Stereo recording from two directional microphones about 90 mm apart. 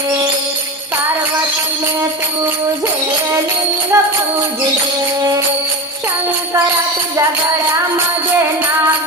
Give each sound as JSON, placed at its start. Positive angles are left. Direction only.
{"t": 3.9, "sound": "music", "side_deg": -35}